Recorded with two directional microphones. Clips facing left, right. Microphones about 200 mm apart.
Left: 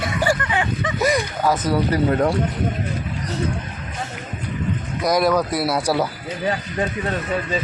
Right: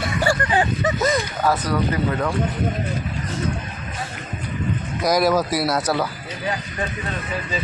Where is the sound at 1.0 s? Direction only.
15° left (ahead or behind).